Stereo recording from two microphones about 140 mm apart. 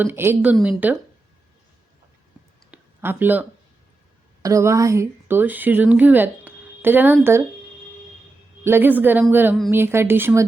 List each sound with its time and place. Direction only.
0.0 s speech: 15° right (ahead or behind)
2.6 s a sound: 10° right (ahead or behind)
4.4 s speech: 20° right (ahead or behind)
8.6 s speech: 15° right (ahead or behind)